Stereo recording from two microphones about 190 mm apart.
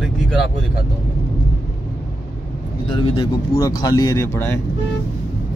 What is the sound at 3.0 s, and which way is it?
Speech, 30° left (ahead or behind).